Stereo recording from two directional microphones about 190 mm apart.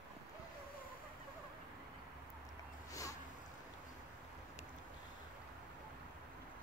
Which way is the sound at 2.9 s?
15° left (ahead or behind).